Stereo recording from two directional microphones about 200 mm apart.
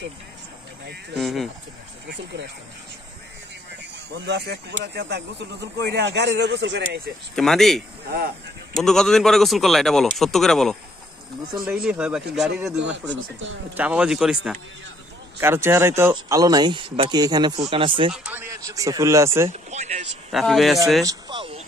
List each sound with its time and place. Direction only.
1.1 s a man's voice: centre (ahead or behind)
2.0 s speech: 60° right (ahead or behind)
4.3 s speech: 55° right (ahead or behind)
7.3 s a man's voice: centre (ahead or behind)
13.1 s speech: 70° right (ahead or behind)
13.7 s a man's voice: 5° right (ahead or behind); by 18.1 s 25° right (ahead or behind)
18.1 s speech: 10° right (ahead or behind)
19.5 s speech: 35° right (ahead or behind)
20.2 s a man's voice: centre (ahead or behind)
21.0 s speech: 20° right (ahead or behind)